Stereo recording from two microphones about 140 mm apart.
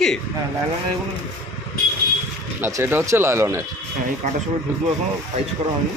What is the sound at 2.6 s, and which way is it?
Speech, 15° right (ahead or behind).